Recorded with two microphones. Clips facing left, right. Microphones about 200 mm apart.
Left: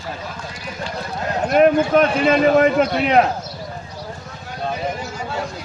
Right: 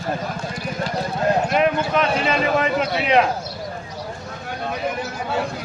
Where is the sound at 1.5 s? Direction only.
45° left (ahead or behind).